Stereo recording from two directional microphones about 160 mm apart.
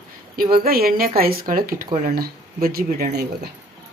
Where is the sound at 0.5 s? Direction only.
70° right (ahead or behind).